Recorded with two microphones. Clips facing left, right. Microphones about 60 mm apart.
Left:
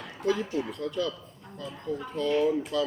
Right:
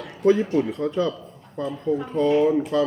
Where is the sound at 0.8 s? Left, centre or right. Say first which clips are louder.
Right 7 dB; right.